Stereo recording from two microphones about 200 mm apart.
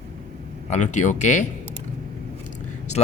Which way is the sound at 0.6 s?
35° left (ahead or behind).